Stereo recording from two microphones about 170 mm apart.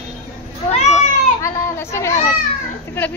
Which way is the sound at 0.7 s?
40° left (ahead or behind).